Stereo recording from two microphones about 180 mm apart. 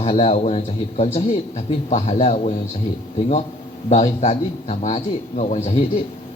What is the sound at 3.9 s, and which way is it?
A man's voice, 40° left (ahead or behind).